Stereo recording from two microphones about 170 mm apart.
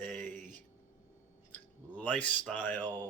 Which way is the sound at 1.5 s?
10° left (ahead or behind).